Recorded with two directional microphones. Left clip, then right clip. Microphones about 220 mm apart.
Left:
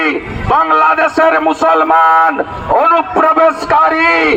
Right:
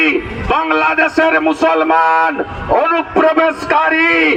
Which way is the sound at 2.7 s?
25° left (ahead or behind).